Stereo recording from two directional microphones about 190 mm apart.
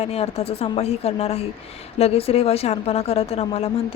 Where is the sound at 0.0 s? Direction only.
30° left (ahead or behind).